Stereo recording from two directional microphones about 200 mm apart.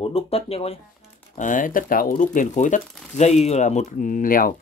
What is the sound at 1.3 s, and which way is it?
Speech, 40° left (ahead or behind).